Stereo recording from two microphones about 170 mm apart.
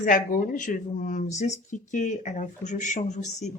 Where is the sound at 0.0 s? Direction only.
50° left (ahead or behind).